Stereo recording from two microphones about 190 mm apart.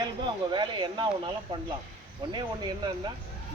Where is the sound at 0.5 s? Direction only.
25° right (ahead or behind).